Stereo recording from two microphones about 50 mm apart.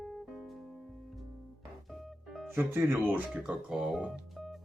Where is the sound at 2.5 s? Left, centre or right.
Right.